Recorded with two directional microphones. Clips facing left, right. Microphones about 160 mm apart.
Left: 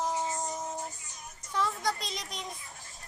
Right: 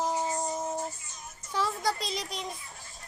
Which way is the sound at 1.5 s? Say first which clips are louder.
Right 1 dB; 5° right (ahead or behind).